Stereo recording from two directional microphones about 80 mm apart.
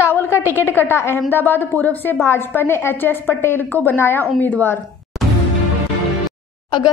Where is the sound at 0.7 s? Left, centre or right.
Left.